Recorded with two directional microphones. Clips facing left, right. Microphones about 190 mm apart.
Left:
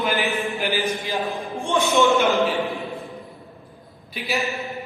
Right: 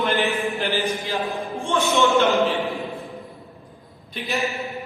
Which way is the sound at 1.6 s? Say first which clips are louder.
Left 1 dB; 15° left (ahead or behind).